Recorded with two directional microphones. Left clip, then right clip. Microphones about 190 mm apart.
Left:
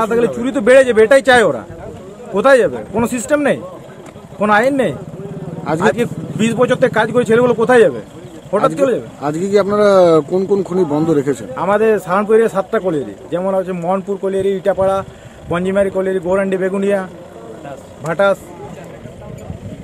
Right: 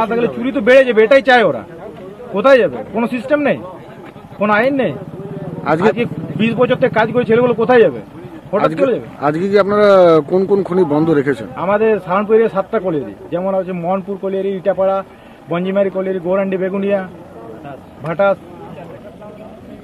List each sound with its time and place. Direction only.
0.0 s speech: 20° left (ahead or behind)